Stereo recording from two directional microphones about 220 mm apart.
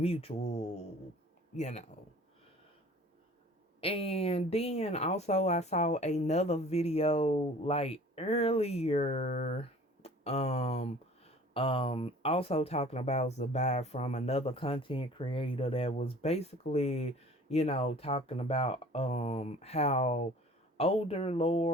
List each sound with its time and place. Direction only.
0.0 s speech: 25° left (ahead or behind)
3.8 s speech: 25° left (ahead or behind)